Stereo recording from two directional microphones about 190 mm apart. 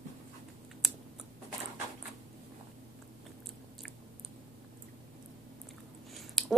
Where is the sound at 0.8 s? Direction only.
Centre (ahead or behind).